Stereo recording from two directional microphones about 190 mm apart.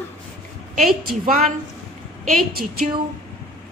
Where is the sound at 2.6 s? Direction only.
45° right (ahead or behind).